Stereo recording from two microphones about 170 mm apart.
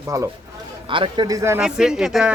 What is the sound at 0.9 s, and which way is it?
Speech, 30° right (ahead or behind).